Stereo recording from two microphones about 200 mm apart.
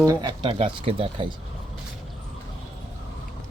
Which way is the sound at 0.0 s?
20° right (ahead or behind).